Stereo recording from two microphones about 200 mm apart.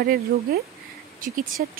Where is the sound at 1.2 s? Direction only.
45° right (ahead or behind).